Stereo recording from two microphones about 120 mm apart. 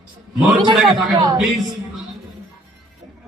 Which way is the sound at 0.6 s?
40° right (ahead or behind).